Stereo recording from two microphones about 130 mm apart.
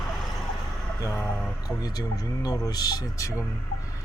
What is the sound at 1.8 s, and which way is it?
Speech, 30° left (ahead or behind).